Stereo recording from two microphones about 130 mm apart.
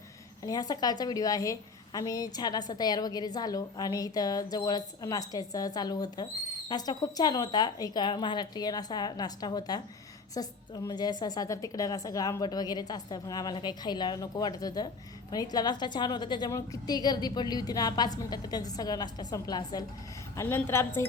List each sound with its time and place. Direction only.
0.4 s a woman's voice: 30° left (ahead or behind)
20.3 s a woman's voice: 20° left (ahead or behind)